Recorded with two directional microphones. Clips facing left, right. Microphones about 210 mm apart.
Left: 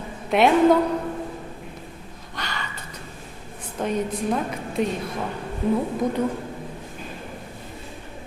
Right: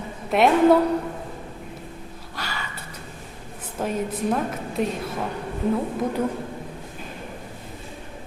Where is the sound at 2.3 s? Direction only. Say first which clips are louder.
Left 1 dB; 5° right (ahead or behind).